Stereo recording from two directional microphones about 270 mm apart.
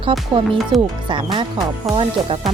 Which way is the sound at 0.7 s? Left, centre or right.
Centre.